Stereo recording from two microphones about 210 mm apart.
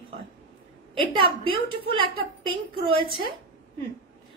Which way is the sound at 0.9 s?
25° right (ahead or behind).